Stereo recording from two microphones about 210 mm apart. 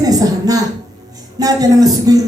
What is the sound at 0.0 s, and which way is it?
Speech, 15° right (ahead or behind).